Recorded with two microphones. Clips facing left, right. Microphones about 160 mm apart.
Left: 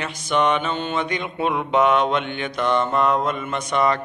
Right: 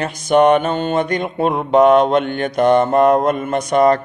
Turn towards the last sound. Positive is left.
turn(degrees=-45)  # may be behind; listen again after turning